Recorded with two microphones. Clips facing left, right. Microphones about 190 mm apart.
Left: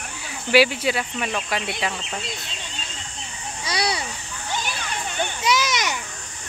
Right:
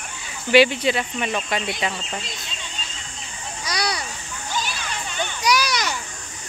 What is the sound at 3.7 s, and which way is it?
Children playing, 30° left (ahead or behind).